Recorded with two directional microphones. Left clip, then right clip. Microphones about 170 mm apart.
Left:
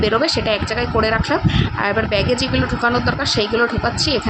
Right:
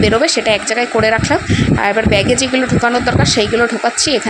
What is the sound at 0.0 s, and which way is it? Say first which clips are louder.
Speech: right 5 dB; 20° right (ahead or behind).